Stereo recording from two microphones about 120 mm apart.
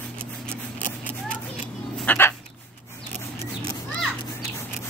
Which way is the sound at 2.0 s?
20° left (ahead or behind).